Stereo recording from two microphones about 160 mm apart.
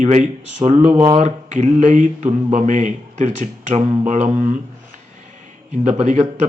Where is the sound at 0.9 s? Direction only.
30° right (ahead or behind).